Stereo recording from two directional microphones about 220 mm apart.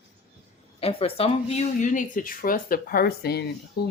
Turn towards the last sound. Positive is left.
turn(degrees=50)  # may be behind; listen again after turning